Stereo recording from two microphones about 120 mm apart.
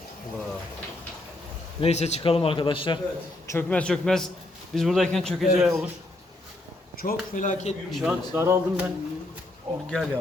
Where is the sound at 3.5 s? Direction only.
10° left (ahead or behind).